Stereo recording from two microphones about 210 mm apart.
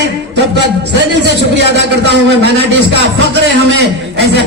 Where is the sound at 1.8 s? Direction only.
55° right (ahead or behind).